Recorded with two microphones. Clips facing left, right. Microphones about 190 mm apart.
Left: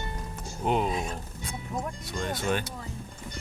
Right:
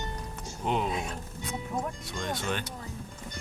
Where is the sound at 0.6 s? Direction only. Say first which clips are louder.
Left 3 dB; 40° left (ahead or behind).